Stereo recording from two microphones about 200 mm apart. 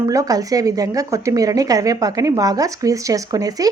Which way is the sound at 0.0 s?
15° right (ahead or behind).